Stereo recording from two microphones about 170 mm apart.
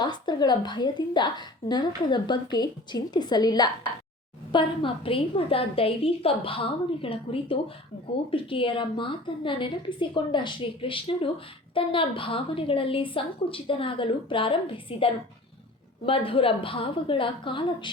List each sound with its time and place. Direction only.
0.0 s a woman's voice: 25° left (ahead or behind)